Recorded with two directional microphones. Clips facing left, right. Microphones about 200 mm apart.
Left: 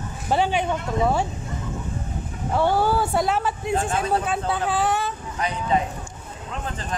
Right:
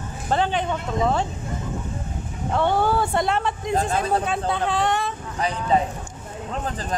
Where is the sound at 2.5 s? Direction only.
5° left (ahead or behind).